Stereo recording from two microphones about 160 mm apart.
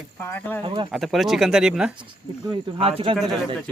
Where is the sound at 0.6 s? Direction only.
30° right (ahead or behind).